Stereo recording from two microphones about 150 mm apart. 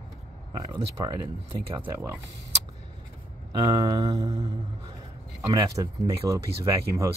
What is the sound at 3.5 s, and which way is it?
Speech, 25° right (ahead or behind).